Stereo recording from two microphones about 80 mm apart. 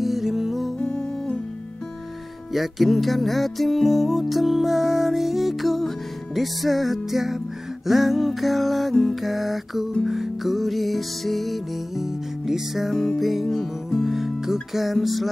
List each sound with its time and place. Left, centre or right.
0.0 s music: centre
0.7 s music: centre
2.5 s music: centre
14.1 s music: centre